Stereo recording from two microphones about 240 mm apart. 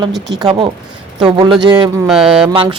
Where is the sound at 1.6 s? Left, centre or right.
Centre.